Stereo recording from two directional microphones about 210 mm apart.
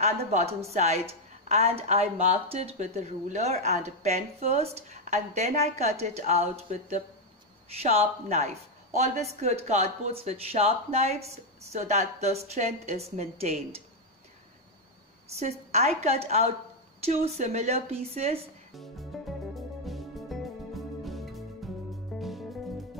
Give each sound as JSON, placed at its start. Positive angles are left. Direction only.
{"t": 0.0, "sound": "speech", "side_deg": -30}
{"t": 7.8, "sound": "speech", "side_deg": -30}
{"t": 15.3, "sound": "speech", "side_deg": -30}
{"t": 19.1, "sound": "music", "side_deg": 0}